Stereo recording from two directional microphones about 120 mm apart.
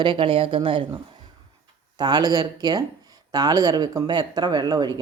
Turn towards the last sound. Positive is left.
turn(degrees=-35)  # may be behind; listen again after turning